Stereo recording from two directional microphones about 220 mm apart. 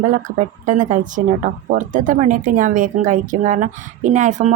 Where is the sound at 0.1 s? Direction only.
35° right (ahead or behind).